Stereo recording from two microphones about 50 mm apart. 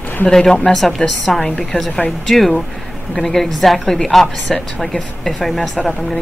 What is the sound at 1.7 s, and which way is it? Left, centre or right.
Speech, left.